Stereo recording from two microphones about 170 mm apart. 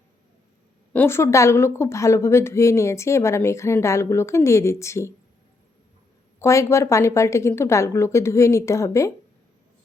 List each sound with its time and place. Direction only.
0.9 s speech: 15° left (ahead or behind)
6.4 s speech: 15° left (ahead or behind)